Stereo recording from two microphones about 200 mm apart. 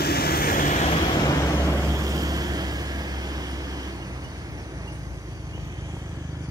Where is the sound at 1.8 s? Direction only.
15° right (ahead or behind).